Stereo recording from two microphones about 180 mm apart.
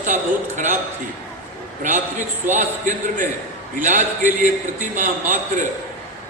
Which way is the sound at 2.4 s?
40° right (ahead or behind).